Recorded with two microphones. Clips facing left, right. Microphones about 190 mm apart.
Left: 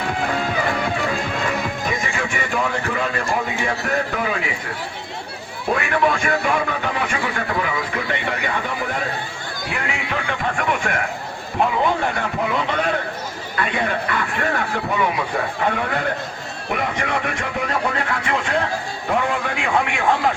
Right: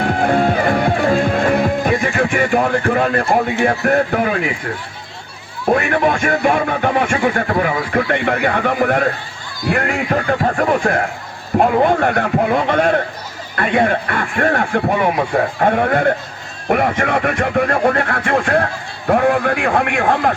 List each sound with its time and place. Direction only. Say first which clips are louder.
0.0 s music: right 8 dB; 50° right (ahead or behind)
5.6 s music: right 5 dB; 45° right (ahead or behind)
9.6 s speech: right 10 dB; 55° right (ahead or behind); by 11.0 s 35° right (ahead or behind)
11.6 s music: right 6 dB; 55° right (ahead or behind)
16.6 s speech: right 8 dB; 55° right (ahead or behind)